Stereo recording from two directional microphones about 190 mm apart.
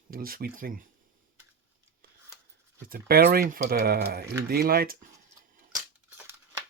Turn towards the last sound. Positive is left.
turn(degrees=-15)  # may be behind; listen again after turning